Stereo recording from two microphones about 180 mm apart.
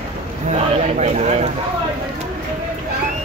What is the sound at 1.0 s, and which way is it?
Speech, 40° right (ahead or behind).